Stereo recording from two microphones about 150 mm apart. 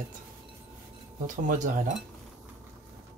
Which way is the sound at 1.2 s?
60° right (ahead or behind).